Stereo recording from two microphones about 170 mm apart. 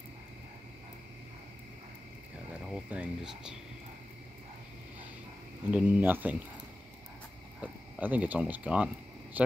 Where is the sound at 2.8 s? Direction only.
5° right (ahead or behind).